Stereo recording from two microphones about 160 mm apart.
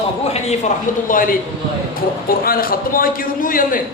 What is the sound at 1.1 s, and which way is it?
Speech, 60° left (ahead or behind).